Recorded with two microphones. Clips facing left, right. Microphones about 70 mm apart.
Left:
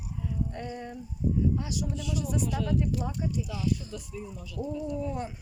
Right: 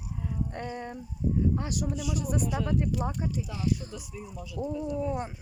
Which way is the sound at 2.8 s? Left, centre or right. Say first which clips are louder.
Right 1 dB; right.